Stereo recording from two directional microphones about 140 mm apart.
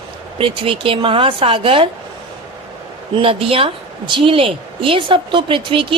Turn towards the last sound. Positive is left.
turn(degrees=-40)  # may be behind; listen again after turning